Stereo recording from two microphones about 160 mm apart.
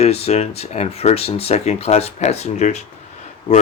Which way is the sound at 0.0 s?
40° left (ahead or behind).